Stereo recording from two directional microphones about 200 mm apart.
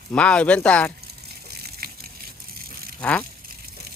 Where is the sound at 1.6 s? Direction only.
50° right (ahead or behind).